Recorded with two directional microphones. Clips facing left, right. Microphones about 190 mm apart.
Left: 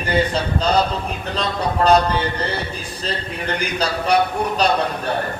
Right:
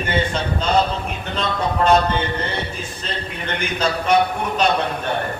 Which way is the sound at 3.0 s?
35° left (ahead or behind).